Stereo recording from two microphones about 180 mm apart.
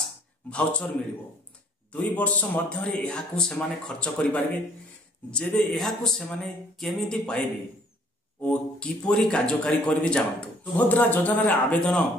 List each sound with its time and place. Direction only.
0.5 s a man's voice: 5° left (ahead or behind)